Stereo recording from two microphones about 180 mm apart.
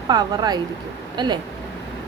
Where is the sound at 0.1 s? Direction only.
20° right (ahead or behind).